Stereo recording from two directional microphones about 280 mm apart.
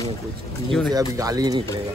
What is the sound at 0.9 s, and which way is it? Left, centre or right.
Speech, centre.